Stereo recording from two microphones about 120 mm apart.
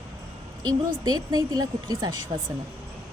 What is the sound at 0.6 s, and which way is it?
Speech, 35° right (ahead or behind).